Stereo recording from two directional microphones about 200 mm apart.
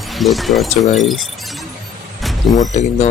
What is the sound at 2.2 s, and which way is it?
Vehicle, centre (ahead or behind).